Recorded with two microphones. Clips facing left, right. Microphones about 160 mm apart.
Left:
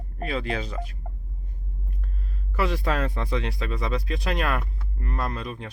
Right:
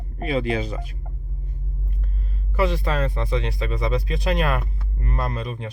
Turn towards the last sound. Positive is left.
turn(degrees=0)  # may be behind; listen again after turning